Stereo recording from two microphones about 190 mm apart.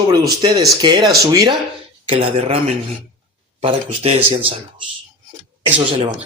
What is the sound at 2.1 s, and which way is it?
A man's voice, 30° right (ahead or behind).